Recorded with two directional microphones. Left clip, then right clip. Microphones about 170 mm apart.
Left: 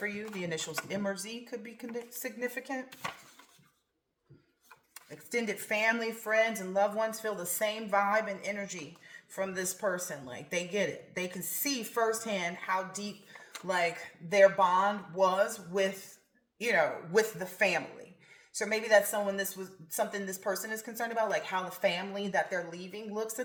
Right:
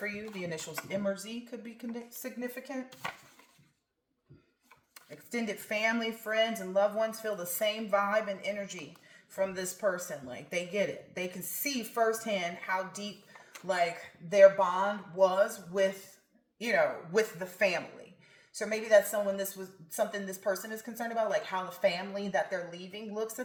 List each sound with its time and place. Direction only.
0.0 s speech: 35° left (ahead or behind)
3.0 s dishes: 5° left (ahead or behind)
4.9 s speech: 35° left (ahead or behind)
14.3 s speech: 40° left (ahead or behind)